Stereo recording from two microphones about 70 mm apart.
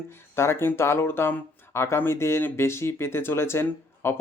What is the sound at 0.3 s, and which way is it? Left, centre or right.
Speech, left.